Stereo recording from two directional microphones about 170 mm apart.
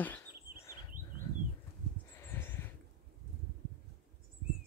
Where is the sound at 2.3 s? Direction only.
15° left (ahead or behind).